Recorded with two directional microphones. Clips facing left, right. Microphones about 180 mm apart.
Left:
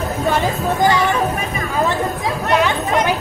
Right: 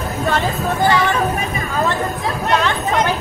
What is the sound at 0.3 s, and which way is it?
A woman's voice, 15° left (ahead or behind).